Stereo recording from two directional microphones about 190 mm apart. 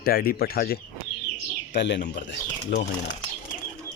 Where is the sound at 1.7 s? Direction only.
65° left (ahead or behind).